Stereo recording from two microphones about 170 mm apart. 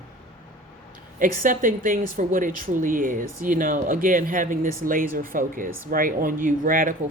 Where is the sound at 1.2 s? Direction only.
55° right (ahead or behind).